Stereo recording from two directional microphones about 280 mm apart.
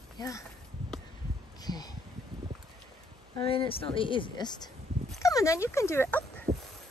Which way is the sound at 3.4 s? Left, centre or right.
Centre.